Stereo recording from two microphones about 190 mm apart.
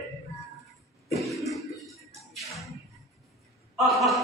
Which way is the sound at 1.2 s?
Centre (ahead or behind).